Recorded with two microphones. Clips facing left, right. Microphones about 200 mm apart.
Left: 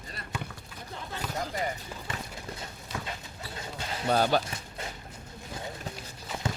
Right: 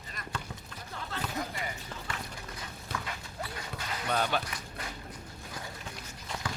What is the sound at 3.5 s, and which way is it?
Basketball bounce, 30° left (ahead or behind).